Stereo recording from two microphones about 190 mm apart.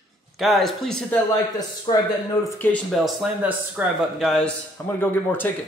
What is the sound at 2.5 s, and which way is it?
Speech, 10° left (ahead or behind).